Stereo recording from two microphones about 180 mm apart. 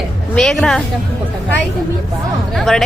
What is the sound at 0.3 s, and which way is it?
Speech, 5° left (ahead or behind).